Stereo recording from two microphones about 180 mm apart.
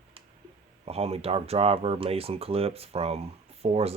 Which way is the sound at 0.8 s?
35° right (ahead or behind).